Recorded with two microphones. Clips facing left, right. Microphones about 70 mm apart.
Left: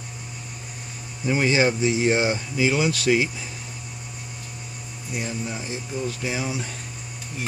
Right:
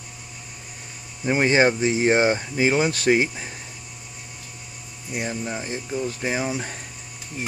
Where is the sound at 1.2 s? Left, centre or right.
Right.